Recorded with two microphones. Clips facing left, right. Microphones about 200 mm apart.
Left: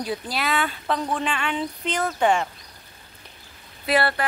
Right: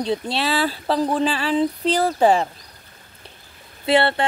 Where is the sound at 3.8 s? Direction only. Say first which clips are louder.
Right 4 dB; 25° right (ahead or behind).